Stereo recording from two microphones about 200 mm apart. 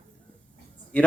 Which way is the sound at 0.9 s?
5° left (ahead or behind).